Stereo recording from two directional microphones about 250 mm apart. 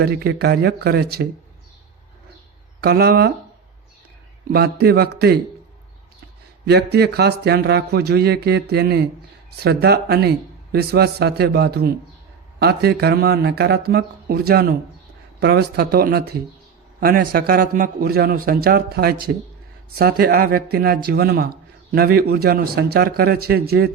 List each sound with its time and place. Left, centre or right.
0.0 s a man's voice: right
2.8 s a man's voice: right
4.5 s a man's voice: right
6.7 s a man's voice: right